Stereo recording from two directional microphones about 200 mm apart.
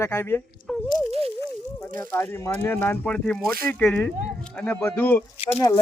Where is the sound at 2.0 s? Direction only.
10° left (ahead or behind).